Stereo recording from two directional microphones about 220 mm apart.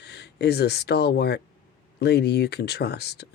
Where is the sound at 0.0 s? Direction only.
50° left (ahead or behind).